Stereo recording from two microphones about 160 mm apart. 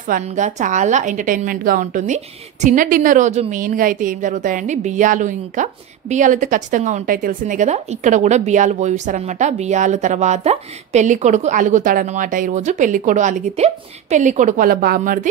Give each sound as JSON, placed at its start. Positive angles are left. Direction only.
{"t": 0.1, "sound": "a woman's voice", "side_deg": -50}